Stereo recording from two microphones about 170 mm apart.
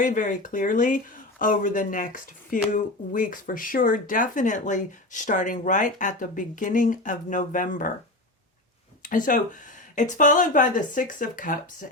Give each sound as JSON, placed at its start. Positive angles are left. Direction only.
{"t": 0.0, "sound": "speech", "side_deg": 50}
{"t": 9.0, "sound": "speech", "side_deg": 50}